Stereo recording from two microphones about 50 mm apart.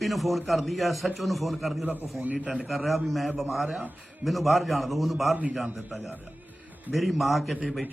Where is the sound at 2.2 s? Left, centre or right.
Right.